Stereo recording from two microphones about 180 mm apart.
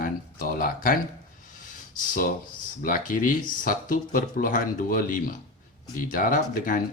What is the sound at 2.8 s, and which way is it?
Speech, 50° left (ahead or behind).